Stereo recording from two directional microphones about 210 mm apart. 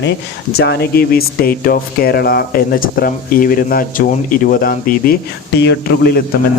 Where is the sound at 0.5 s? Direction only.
50° left (ahead or behind).